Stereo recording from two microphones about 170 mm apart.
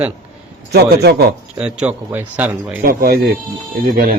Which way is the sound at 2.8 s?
65° right (ahead or behind).